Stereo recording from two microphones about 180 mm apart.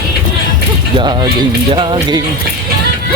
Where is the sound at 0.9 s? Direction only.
25° right (ahead or behind).